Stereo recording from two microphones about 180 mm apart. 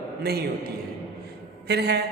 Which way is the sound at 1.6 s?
65° right (ahead or behind).